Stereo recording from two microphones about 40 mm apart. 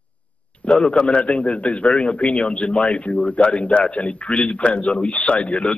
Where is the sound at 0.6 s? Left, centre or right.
Left.